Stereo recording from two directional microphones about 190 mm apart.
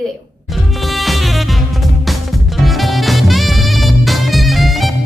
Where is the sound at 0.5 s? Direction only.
Centre (ahead or behind).